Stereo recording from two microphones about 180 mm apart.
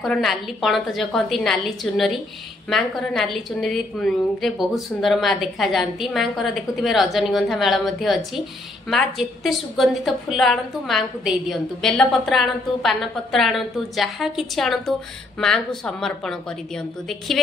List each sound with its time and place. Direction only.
0.0 s a woman's voice: centre (ahead or behind)